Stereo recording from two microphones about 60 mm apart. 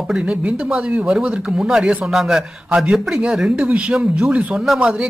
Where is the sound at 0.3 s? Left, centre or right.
Right.